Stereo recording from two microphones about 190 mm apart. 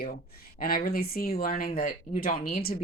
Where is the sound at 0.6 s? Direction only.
55° left (ahead or behind).